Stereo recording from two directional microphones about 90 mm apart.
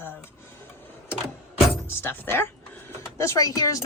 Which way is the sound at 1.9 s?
25° left (ahead or behind).